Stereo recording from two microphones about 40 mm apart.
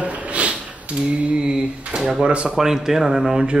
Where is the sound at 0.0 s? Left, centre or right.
Right.